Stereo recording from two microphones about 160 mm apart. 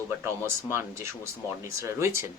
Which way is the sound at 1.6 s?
15° right (ahead or behind).